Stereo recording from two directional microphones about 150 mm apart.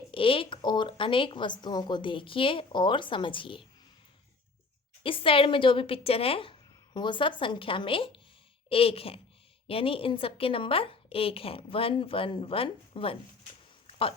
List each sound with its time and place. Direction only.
0.1 s speech: 35° left (ahead or behind)
5.0 s speech: 35° left (ahead or behind)